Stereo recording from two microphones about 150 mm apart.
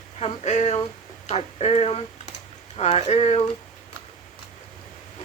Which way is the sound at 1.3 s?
45° left (ahead or behind).